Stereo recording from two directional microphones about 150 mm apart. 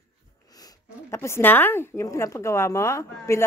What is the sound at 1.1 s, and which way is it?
A woman's voice, 15° left (ahead or behind).